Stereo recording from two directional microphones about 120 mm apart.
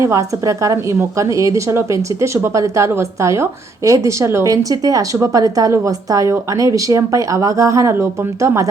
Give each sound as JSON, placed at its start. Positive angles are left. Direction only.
{"t": 0.0, "sound": "a woman's voice", "side_deg": -25}